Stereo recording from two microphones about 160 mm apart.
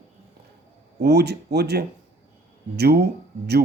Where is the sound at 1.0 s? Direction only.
90° right.